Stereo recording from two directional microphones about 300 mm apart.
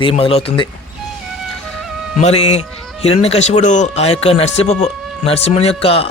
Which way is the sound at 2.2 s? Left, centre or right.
Left.